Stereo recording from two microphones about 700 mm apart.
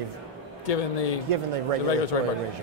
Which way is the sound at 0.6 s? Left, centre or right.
Left.